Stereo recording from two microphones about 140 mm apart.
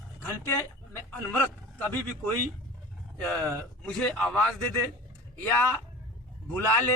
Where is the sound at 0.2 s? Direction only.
20° left (ahead or behind).